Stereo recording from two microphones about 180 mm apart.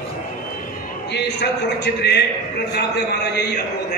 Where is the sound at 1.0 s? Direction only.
70° left (ahead or behind).